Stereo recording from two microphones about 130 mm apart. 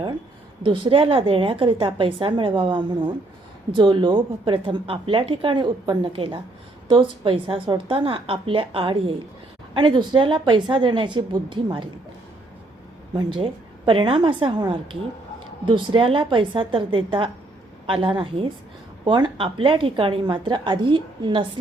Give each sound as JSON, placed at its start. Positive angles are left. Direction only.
{"t": 0.6, "sound": "a woman's voice", "side_deg": -45}
{"t": 13.1, "sound": "a woman's voice", "side_deg": -40}